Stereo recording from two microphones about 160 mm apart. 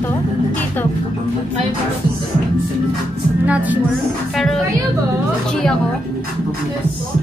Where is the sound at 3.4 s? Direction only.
10° right (ahead or behind).